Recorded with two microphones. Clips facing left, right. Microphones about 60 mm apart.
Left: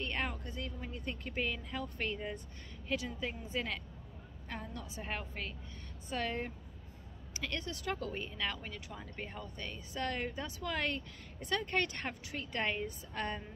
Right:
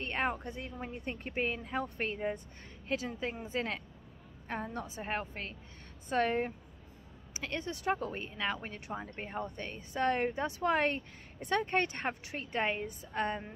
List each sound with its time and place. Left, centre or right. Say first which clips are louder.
0.0 s a woman's voice: right 4 dB; right